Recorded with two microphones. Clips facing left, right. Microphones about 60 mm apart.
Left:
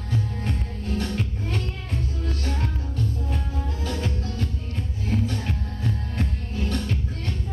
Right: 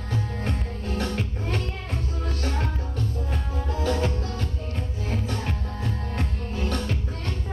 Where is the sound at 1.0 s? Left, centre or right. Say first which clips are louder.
Even; right.